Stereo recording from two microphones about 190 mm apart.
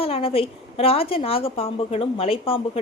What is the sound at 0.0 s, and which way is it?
A woman's voice, 30° left (ahead or behind).